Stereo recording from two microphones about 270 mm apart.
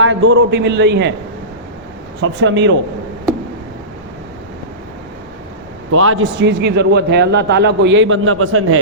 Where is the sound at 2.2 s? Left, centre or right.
Right.